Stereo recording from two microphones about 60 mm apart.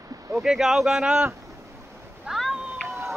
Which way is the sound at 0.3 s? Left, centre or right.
Centre.